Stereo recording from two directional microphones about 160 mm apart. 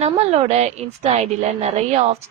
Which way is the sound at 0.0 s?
40° right (ahead or behind).